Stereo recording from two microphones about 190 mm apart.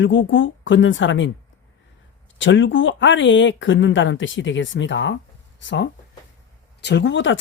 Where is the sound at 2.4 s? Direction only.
75° left (ahead or behind).